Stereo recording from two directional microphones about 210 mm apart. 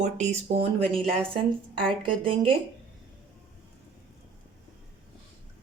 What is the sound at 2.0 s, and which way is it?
Speech, 25° right (ahead or behind).